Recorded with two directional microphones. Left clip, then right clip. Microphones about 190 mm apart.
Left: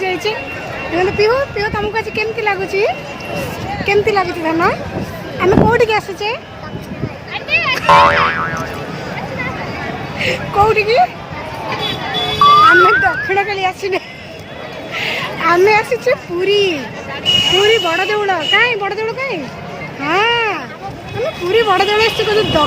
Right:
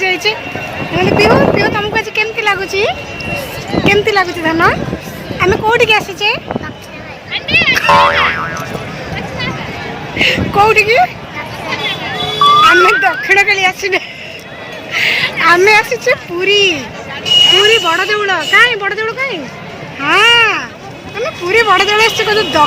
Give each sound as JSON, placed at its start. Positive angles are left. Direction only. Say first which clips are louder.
{"t": 0.0, "sound": "a sound", "louder": "right 5 dB", "side_deg": 0}
{"t": 0.9, "sound": "speech", "louder": "right 4 dB", "side_deg": -10}
{"t": 7.7, "sound": "boing", "louder": "left 1 dB", "side_deg": 0}
{"t": 10.2, "sound": "speech", "louder": "right 4 dB", "side_deg": -5}
{"t": 12.6, "sound": "speech", "louder": "right 1 dB", "side_deg": -5}
{"t": 20.0, "sound": "a sound", "louder": "right 6 dB", "side_deg": -10}
{"t": 21.2, "sound": "speech", "louder": "right 2 dB", "side_deg": -10}